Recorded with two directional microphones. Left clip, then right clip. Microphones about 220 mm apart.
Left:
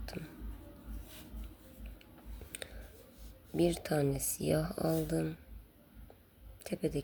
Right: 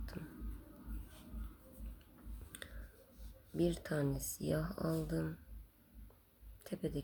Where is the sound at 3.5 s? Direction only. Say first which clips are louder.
Left 6 dB; 20° left (ahead or behind).